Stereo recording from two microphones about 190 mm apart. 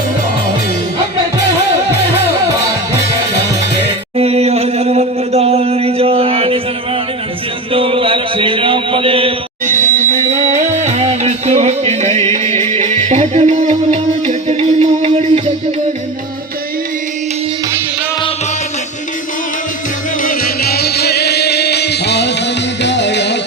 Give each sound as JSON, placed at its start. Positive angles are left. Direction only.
{"t": 4.2, "sound": "chant", "side_deg": -35}
{"t": 7.7, "sound": "mantra", "side_deg": -30}
{"t": 9.6, "sound": "music", "side_deg": -40}
{"t": 20.2, "sound": "music", "side_deg": 50}